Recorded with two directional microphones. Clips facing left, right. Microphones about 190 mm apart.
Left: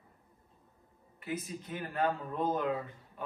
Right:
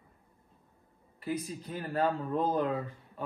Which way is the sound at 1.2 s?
35° right (ahead or behind).